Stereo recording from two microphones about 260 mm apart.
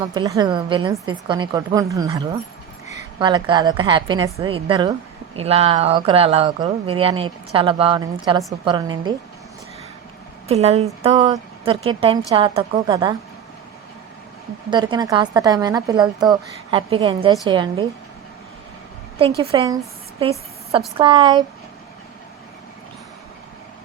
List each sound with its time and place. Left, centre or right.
0.0 s a woman's voice: centre
10.5 s a woman's voice: right
14.7 s a woman's voice: centre
19.4 s speech: centre